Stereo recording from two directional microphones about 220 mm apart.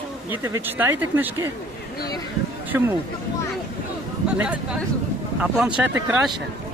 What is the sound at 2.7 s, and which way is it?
Speech, 10° right (ahead or behind).